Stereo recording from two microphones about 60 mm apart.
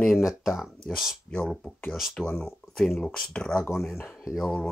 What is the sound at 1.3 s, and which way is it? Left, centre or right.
Speech, centre.